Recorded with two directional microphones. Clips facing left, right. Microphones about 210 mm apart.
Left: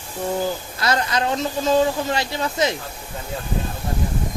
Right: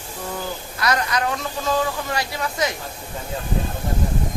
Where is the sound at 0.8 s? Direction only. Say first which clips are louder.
Even; 25° left (ahead or behind).